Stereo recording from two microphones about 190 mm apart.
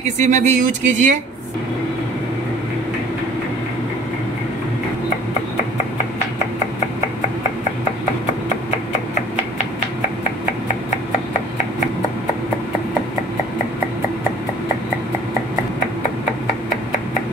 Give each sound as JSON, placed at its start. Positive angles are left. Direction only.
{"t": 0.0, "sound": "speech", "side_deg": -40}